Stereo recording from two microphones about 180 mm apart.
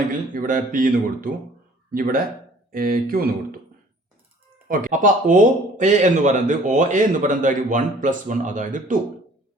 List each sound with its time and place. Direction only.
0.3 s speech: 50° right (ahead or behind)
4.7 s speech: 50° right (ahead or behind)